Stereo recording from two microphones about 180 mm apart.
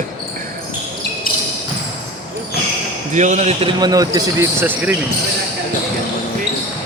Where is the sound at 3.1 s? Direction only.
40° right (ahead or behind).